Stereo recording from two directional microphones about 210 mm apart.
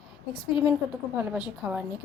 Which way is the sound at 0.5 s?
25° left (ahead or behind).